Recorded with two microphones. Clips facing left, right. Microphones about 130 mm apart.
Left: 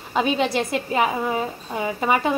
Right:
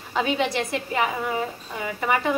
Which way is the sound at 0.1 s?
20° left (ahead or behind).